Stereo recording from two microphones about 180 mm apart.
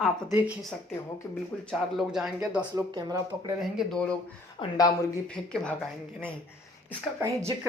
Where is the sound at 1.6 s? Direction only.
Centre (ahead or behind).